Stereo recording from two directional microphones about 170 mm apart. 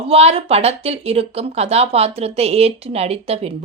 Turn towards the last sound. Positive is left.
turn(degrees=-35)  # may be behind; listen again after turning